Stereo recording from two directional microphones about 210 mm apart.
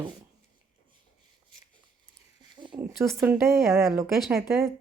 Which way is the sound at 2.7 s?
10° right (ahead or behind).